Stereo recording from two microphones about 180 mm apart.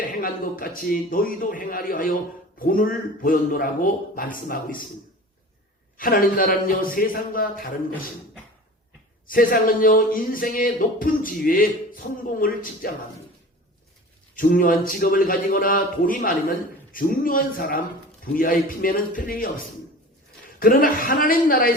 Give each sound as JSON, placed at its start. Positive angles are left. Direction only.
{"t": 0.2, "sound": "speech", "side_deg": 55}
{"t": 6.0, "sound": "speech", "side_deg": 55}
{"t": 9.2, "sound": "speech", "side_deg": 50}
{"t": 14.3, "sound": "speech", "side_deg": 50}